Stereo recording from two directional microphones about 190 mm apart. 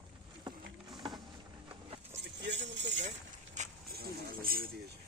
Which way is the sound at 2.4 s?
65° right (ahead or behind).